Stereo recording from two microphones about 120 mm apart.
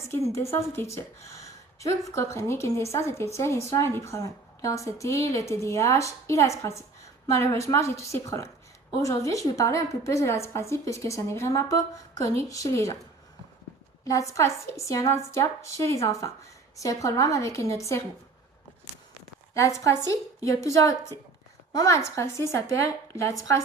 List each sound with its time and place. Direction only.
0.1 s a woman's voice: 25° left (ahead or behind)
14.0 s a woman's voice: 25° left (ahead or behind)
19.5 s a woman's voice: 25° left (ahead or behind)